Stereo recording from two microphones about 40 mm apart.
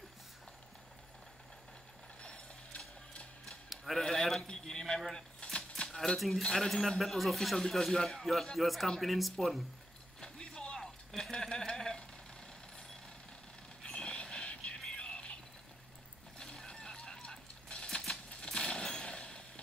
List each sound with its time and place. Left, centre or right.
2.2 s mechanisms: left
3.7 s a sound: centre
4.0 s a sound: centre
5.9 s cutlery: centre
6.1 s speech: centre
6.4 s speech: centre
7.0 s speech: centre
7.7 s speech: centre
8.5 s speech: centre
10.2 s a sound: centre
11.7 s vehicle: centre
13.8 s music: left
16.3 s horse: centre
18.4 s a sound: centre